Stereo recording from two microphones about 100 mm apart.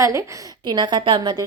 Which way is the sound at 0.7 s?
50° right (ahead or behind).